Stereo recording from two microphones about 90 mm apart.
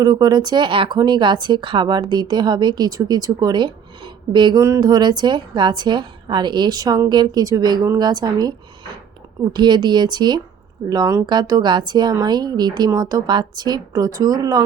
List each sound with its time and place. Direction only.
0.0 s a woman's voice: 45° right (ahead or behind)
4.5 s a sound: 35° right (ahead or behind)
4.8 s a woman's voice: 50° right (ahead or behind)